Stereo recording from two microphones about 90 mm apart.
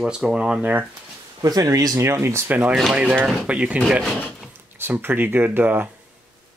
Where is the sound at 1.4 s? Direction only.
40° right (ahead or behind); by 2.7 s 20° right (ahead or behind).